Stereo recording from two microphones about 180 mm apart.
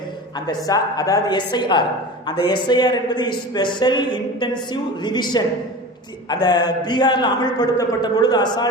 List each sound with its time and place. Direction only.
0.3 s speech: 20° left (ahead or behind)